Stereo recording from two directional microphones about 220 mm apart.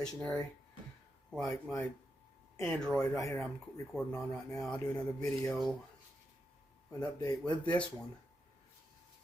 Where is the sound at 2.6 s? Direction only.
5° left (ahead or behind).